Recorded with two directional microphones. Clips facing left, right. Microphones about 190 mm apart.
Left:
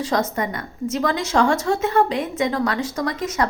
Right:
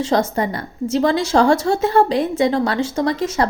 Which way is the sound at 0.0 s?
30° right (ahead or behind).